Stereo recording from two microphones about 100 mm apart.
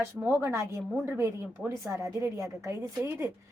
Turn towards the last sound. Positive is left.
turn(degrees=-25)  # may be behind; listen again after turning